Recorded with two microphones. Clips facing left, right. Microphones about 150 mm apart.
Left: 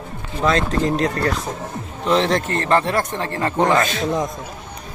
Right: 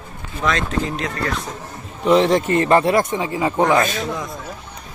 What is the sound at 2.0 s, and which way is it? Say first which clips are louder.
Speech: right 3 dB; 10° right (ahead or behind).